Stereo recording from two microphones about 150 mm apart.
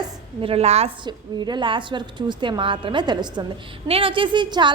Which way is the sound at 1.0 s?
30° right (ahead or behind).